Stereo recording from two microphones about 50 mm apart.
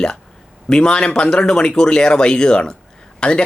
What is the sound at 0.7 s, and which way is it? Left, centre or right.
A man's voice, centre.